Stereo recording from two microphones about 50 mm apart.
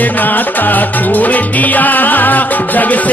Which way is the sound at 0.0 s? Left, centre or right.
Left.